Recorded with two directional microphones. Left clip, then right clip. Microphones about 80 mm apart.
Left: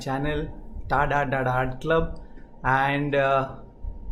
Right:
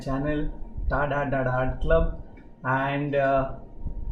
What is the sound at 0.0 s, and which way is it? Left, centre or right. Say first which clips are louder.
Speech: left 1 dB; left.